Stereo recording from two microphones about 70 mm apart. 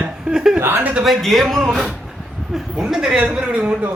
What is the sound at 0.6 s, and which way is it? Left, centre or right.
Speech, right.